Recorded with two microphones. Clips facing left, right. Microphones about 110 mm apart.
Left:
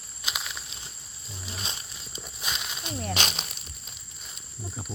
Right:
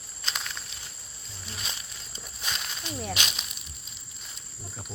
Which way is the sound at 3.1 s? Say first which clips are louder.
Left 4 dB; 45° left (ahead or behind).